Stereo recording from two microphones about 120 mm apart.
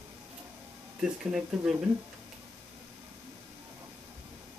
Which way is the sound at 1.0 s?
5° right (ahead or behind).